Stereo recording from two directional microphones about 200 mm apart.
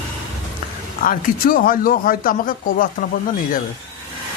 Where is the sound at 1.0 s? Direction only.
45° left (ahead or behind).